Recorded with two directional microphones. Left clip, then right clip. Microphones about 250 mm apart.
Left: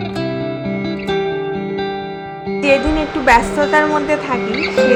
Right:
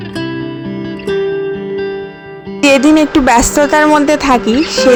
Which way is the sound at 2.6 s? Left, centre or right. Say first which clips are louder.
Right 7 dB; right.